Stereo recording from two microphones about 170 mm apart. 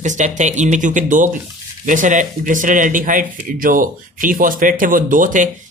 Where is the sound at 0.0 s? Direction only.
45° right (ahead or behind).